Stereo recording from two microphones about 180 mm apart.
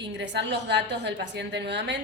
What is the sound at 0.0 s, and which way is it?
A woman's voice, 75° right (ahead or behind).